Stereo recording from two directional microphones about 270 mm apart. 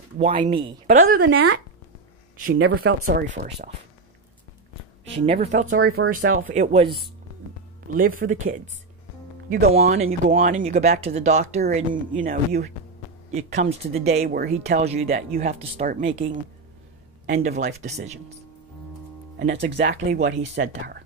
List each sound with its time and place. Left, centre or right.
0.2 s speech: right
1.3 s speech: right
2.3 s speech: right
5.2 s speech: right
8.2 s speech: right
9.7 s speech: right
17.3 s speech: right
19.3 s speech: right
20.1 s speech: right